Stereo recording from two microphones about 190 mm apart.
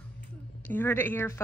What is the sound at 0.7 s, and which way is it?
Speech, 10° left (ahead or behind).